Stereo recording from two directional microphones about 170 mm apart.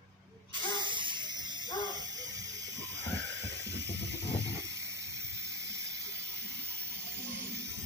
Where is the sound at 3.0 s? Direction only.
90° right.